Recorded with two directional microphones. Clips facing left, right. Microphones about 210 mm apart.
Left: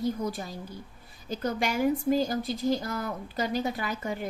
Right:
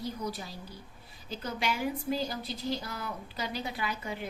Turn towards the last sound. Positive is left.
turn(degrees=45)  # may be behind; listen again after turning